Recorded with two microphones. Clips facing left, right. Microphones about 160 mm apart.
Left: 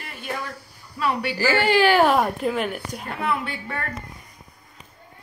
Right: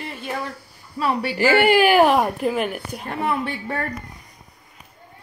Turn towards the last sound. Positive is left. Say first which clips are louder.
# right 4 dB
turn(degrees=-35)  # may be behind; listen again after turning